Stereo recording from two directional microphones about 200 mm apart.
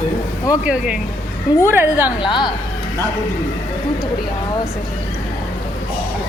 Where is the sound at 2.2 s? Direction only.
20° left (ahead or behind).